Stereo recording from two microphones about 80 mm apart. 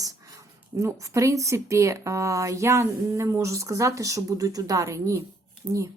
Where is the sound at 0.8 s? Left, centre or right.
Right.